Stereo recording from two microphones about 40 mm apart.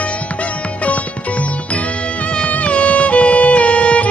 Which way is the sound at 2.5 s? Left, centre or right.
Left.